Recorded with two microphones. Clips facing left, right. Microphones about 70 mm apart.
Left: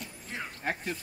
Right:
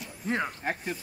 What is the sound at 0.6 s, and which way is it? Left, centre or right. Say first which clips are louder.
Speech: right 1 dB; centre.